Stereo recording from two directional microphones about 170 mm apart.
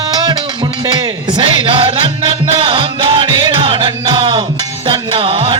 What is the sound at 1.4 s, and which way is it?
Music, 30° right (ahead or behind).